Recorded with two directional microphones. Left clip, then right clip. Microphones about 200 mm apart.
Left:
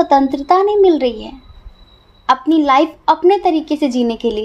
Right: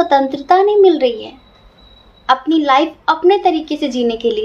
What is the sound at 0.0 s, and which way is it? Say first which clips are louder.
A woman's voice: left 1 dB; 40° left (ahead or behind).